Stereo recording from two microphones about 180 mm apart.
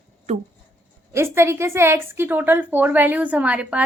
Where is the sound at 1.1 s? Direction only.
15° right (ahead or behind).